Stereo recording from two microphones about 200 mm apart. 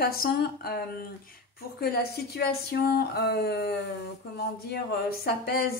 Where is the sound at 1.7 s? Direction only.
50° left (ahead or behind).